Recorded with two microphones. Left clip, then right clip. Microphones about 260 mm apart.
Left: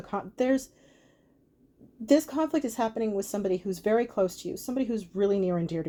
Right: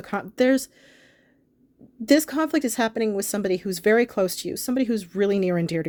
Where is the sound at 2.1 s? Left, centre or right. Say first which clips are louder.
Right 4 dB; right.